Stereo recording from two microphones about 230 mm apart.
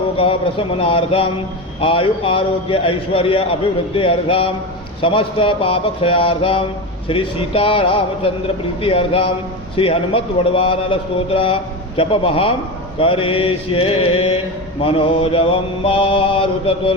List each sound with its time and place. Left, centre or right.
0.2 s a man's voice: left